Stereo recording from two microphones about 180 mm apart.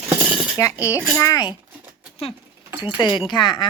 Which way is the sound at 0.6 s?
15° left (ahead or behind).